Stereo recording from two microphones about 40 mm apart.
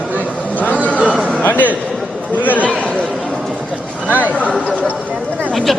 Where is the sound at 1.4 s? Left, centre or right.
Left.